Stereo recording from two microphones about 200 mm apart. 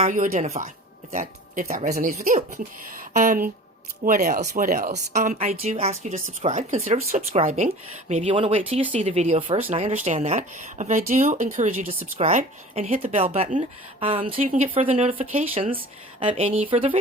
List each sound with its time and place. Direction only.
0.0 s a woman's voice: 40° right (ahead or behind)
14.4 s a woman's voice: 40° right (ahead or behind)